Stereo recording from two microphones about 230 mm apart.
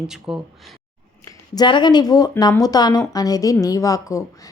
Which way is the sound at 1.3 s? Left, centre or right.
Centre.